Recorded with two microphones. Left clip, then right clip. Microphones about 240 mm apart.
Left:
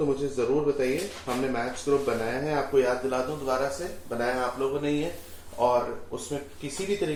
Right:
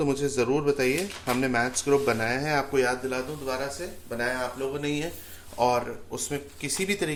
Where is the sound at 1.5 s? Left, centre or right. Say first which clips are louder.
Right 3 dB; right.